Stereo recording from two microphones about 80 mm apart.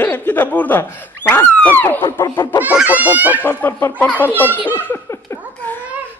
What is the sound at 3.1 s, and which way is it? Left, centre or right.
Speech, right.